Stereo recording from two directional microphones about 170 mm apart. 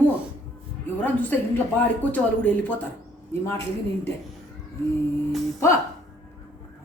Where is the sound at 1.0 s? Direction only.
10° left (ahead or behind).